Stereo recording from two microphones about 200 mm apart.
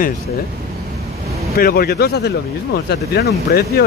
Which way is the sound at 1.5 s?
50° left (ahead or behind).